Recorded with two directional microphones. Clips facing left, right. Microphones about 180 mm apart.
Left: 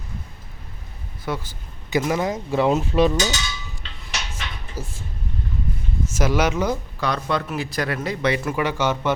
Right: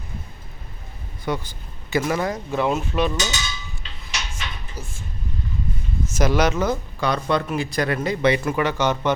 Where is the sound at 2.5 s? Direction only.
30° left (ahead or behind).